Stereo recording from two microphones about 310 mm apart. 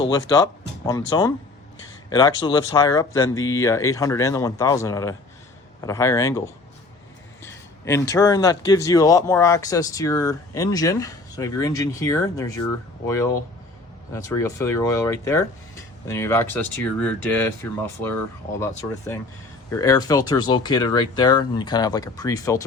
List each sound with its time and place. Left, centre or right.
0.3 s speech: centre
2.0 s speech: centre
19.8 s speech: centre